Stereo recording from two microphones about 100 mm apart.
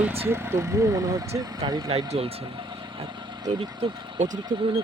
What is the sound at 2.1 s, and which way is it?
Speech, 80° right.